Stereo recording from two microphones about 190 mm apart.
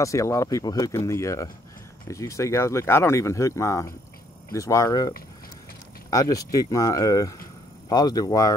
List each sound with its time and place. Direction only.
0.0 s speech: 15° left (ahead or behind)